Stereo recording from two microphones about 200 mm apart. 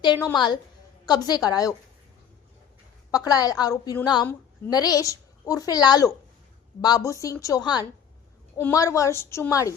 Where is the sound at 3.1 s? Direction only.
20° left (ahead or behind).